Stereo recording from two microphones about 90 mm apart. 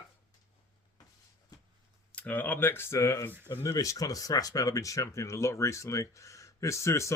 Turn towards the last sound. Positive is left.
turn(degrees=35)  # may be behind; listen again after turning